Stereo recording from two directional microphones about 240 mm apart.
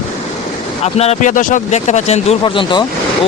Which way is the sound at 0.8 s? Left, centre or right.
Left.